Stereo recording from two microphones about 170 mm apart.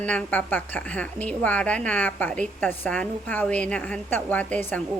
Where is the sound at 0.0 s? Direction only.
5° left (ahead or behind).